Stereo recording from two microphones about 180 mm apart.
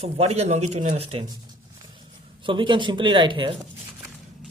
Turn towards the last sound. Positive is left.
turn(degrees=-30)  # may be behind; listen again after turning